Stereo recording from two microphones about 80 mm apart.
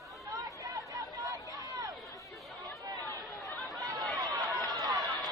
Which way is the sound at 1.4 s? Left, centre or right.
Left.